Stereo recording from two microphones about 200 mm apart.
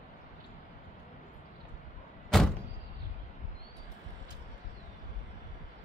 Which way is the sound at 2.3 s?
Centre (ahead or behind).